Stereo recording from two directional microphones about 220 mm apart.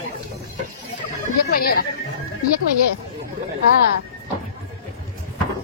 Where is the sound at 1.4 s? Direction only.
45° left (ahead or behind).